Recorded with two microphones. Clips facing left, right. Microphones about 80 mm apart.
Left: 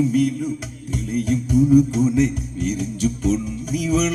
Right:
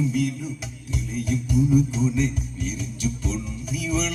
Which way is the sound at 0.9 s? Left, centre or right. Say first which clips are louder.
Left 5 dB; left.